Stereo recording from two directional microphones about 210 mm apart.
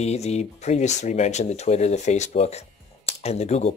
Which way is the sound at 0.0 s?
30° left (ahead or behind).